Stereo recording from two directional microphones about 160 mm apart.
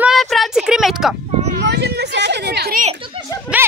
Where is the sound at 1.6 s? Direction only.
90° right.